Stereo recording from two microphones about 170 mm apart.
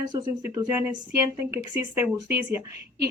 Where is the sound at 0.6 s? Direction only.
10° right (ahead or behind).